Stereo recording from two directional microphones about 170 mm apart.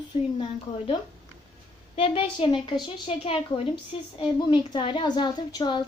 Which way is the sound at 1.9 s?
35° left (ahead or behind).